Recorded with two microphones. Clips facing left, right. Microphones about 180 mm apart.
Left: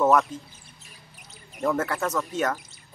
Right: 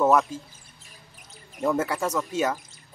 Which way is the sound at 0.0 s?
10° right (ahead or behind).